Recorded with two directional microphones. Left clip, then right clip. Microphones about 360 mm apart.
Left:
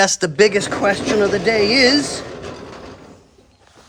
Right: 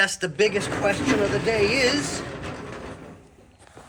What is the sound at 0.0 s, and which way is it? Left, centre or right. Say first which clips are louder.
Speech: left 7 dB; centre.